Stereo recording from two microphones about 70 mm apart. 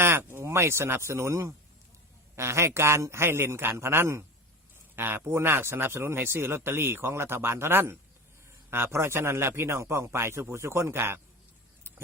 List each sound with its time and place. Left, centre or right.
0.0 s speech: right